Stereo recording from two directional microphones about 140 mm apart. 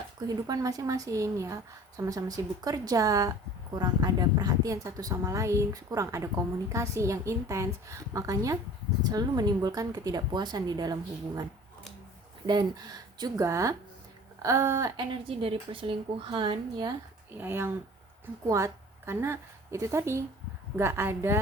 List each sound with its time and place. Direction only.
0.2 s a woman's voice: 25° right (ahead or behind)
12.5 s a woman's voice: 30° right (ahead or behind)
15.1 s a woman's voice: 40° right (ahead or behind)
17.3 s a woman's voice: 15° right (ahead or behind)